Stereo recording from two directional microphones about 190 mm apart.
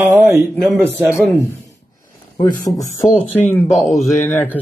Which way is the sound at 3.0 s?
10° left (ahead or behind).